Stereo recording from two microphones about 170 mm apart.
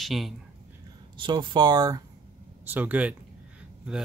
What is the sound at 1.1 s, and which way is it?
Speech, 30° right (ahead or behind).